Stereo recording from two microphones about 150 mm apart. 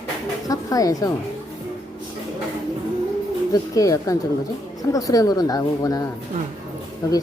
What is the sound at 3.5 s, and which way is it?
A woman's voice, 25° left (ahead or behind).